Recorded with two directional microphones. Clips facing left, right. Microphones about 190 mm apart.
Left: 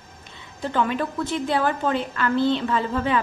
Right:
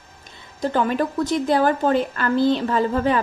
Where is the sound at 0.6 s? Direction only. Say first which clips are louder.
Right 3 dB; 40° right (ahead or behind).